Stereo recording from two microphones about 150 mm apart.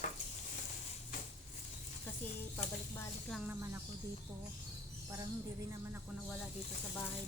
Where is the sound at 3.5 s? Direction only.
15° right (ahead or behind).